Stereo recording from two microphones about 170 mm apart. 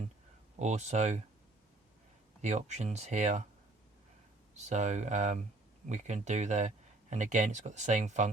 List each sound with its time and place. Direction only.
0.6 s speech: 40° right (ahead or behind)
2.4 s speech: 40° right (ahead or behind)
4.5 s speech: 45° right (ahead or behind)